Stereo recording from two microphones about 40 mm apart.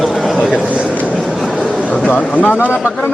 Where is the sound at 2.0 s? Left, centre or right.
Left.